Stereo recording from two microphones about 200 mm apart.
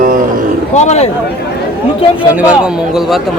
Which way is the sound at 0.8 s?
35° left (ahead or behind).